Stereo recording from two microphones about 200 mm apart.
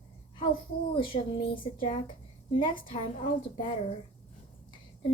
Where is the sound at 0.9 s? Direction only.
25° left (ahead or behind).